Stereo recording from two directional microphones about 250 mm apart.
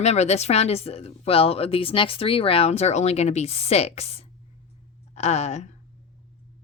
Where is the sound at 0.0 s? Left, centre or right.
Left.